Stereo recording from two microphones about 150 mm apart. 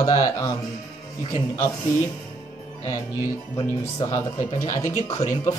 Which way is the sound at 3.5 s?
25° left (ahead or behind).